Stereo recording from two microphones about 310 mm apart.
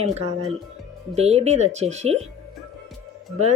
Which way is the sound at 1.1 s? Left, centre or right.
Right.